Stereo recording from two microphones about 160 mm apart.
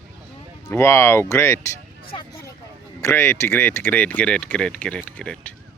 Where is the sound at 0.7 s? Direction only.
15° left (ahead or behind).